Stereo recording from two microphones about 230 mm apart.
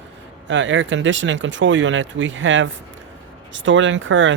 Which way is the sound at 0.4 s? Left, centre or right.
Right.